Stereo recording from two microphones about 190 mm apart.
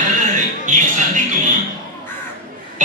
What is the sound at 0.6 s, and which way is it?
Music, 45° right (ahead or behind).